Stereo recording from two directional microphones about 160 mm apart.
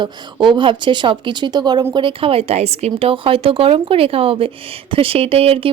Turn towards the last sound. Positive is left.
turn(degrees=-35)  # may be behind; listen again after turning